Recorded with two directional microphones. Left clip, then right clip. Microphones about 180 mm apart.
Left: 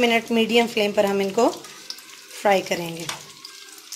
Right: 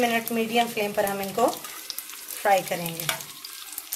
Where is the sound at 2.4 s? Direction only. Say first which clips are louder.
Left 2 dB; 50° left (ahead or behind).